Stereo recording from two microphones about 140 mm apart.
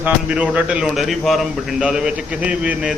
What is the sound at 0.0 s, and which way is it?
A man's voice, 5° right (ahead or behind).